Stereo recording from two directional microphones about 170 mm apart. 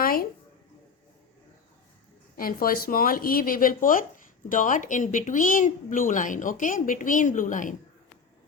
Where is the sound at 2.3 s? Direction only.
55° left (ahead or behind).